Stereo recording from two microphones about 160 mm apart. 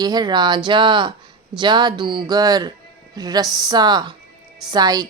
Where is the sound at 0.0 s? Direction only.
25° right (ahead or behind).